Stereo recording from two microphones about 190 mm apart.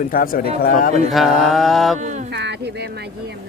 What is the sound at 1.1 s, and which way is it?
Mantra, centre (ahead or behind).